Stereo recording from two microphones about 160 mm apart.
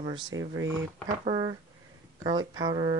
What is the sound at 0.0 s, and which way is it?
Speech, 30° right (ahead or behind).